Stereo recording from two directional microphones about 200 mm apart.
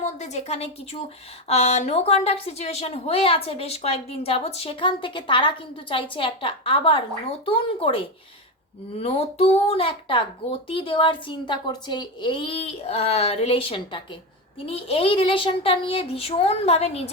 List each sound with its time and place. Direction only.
0.0 s a woman's voice: 35° left (ahead or behind)